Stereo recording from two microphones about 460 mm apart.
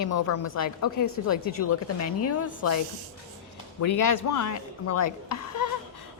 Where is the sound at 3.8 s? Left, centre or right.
Left.